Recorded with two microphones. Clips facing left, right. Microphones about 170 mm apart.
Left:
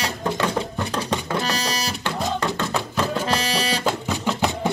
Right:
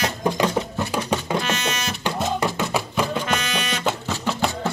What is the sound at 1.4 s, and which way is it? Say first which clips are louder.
Music: even; 35° left (ahead or behind).